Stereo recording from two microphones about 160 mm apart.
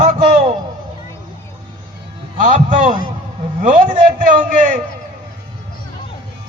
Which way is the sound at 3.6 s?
55° right (ahead or behind).